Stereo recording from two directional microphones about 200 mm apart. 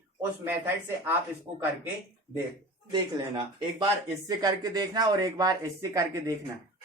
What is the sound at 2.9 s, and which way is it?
Speech, 20° right (ahead or behind).